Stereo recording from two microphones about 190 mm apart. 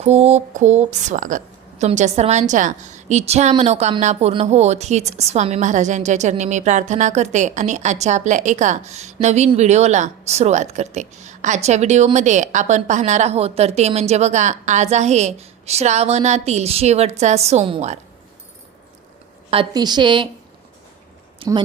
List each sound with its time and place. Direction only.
0.0 s speech: 35° right (ahead or behind)
19.5 s a woman's voice: 25° right (ahead or behind)
21.3 s a sound: 25° right (ahead or behind)